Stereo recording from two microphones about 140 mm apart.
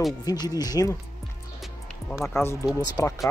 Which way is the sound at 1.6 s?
Centre (ahead or behind).